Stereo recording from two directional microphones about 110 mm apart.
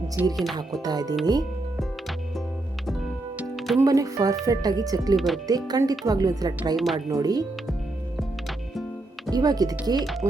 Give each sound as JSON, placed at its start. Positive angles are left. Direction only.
{"t": 0.2, "sound": "speech", "side_deg": -15}
{"t": 0.5, "sound": "speech", "side_deg": -40}
{"t": 3.5, "sound": "music", "side_deg": 0}
{"t": 3.8, "sound": "speech", "side_deg": -30}
{"t": 5.1, "sound": "speech", "side_deg": 0}
{"t": 5.5, "sound": "speech", "side_deg": -35}
{"t": 6.7, "sound": "speech", "side_deg": 0}
{"t": 7.1, "sound": "speech", "side_deg": -35}
{"t": 9.3, "sound": "speech", "side_deg": -35}
{"t": 10.0, "sound": "speech", "side_deg": 0}